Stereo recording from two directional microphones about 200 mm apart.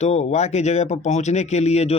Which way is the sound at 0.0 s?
35° left (ahead or behind).